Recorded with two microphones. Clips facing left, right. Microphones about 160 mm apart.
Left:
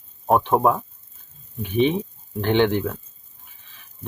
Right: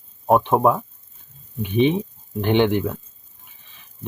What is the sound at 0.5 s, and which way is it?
Speech, centre (ahead or behind).